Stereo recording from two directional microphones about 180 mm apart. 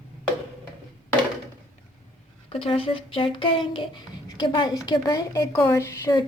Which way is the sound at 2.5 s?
30° left (ahead or behind).